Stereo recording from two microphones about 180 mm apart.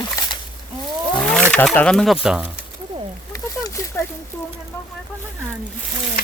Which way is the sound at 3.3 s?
15° left (ahead or behind).